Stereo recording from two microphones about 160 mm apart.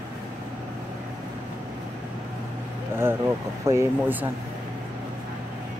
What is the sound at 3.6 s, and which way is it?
Speech, 15° right (ahead or behind).